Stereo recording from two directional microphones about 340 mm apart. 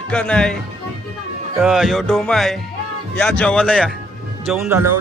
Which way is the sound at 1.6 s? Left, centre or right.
Centre.